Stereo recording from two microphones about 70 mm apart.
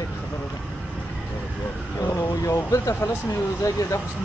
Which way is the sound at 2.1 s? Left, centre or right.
Left.